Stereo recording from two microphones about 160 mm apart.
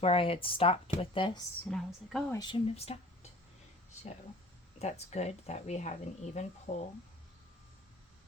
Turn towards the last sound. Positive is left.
turn(degrees=45)  # may be behind; listen again after turning